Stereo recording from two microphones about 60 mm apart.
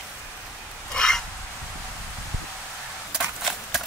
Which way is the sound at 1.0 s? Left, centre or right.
Centre.